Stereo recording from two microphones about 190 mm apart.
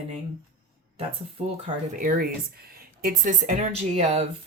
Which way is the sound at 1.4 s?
30° right (ahead or behind).